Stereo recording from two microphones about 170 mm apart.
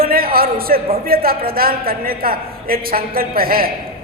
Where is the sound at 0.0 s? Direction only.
60° right (ahead or behind).